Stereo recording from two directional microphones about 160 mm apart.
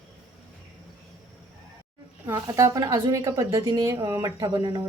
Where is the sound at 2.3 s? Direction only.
20° right (ahead or behind).